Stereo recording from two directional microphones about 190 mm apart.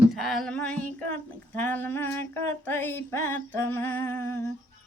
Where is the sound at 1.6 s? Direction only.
10° left (ahead or behind).